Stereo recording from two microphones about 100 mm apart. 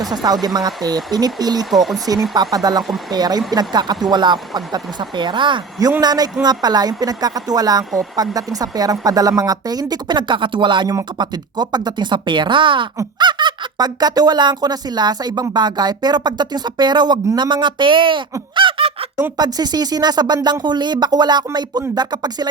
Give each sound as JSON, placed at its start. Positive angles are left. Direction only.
{"t": 0.0, "sound": "a woman's voice", "side_deg": -45}
{"t": 1.7, "sound": "speech", "side_deg": 0}
{"t": 2.3, "sound": "speech", "side_deg": -40}
{"t": 6.0, "sound": "a woman's voice", "side_deg": -40}
{"t": 10.8, "sound": "speech", "side_deg": -40}
{"t": 19.4, "sound": "speech", "side_deg": -40}